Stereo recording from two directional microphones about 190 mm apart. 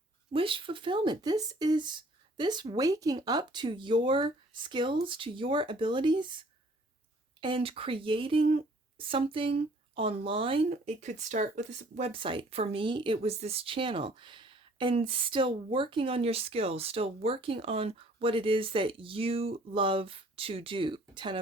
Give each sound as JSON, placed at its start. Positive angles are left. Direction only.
{"t": 0.3, "sound": "speech", "side_deg": -25}
{"t": 7.4, "sound": "speech", "side_deg": -30}